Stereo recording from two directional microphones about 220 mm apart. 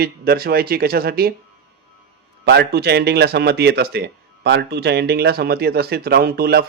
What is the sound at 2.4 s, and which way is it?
Speech, 45° right (ahead or behind).